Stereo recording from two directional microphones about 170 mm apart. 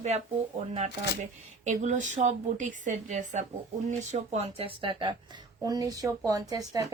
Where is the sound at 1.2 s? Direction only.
45° right (ahead or behind); by 6.6 s 20° right (ahead or behind).